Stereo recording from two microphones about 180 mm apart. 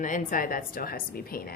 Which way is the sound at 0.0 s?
45° left (ahead or behind).